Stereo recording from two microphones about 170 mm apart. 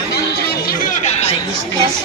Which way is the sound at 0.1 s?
70° left (ahead or behind).